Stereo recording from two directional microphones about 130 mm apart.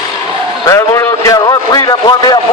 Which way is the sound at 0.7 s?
25° left (ahead or behind).